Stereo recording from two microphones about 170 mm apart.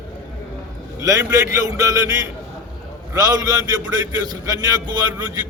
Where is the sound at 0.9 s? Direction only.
20° right (ahead or behind).